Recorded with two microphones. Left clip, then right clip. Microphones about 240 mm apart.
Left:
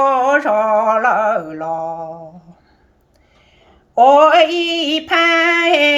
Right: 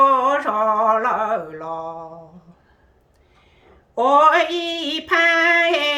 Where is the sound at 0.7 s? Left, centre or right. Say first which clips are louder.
Left 1 dB; right.